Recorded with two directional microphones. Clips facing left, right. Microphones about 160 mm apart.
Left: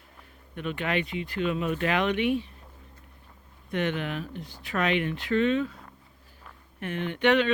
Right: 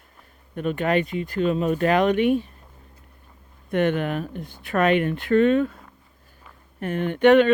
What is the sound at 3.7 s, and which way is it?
Speech, 50° right (ahead or behind).